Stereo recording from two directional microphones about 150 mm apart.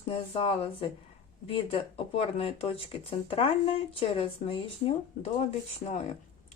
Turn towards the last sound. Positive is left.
turn(degrees=45)  # may be behind; listen again after turning